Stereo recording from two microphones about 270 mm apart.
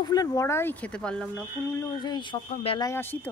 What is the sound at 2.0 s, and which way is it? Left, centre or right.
Speech, centre.